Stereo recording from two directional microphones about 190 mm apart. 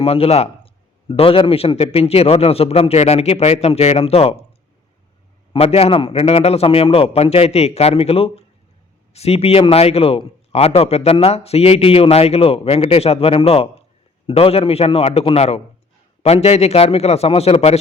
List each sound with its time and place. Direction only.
0.0 s a man's voice: 30° left (ahead or behind)
5.5 s a man's voice: 30° left (ahead or behind)